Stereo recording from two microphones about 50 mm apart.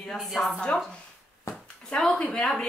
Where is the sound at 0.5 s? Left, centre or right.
Centre.